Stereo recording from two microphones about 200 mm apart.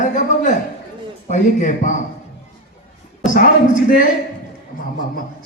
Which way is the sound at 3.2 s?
40° left (ahead or behind).